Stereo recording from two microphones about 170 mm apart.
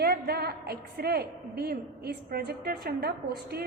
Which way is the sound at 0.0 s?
70° right (ahead or behind).